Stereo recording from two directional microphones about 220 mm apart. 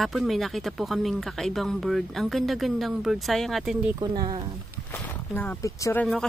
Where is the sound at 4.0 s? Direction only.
20° right (ahead or behind).